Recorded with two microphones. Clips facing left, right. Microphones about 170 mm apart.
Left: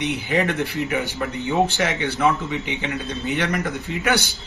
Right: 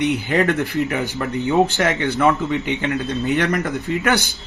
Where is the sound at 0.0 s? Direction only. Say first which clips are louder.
Right 4 dB; 50° right (ahead or behind).